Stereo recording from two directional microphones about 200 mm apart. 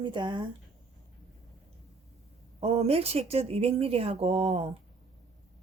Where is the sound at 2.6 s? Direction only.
30° right (ahead or behind).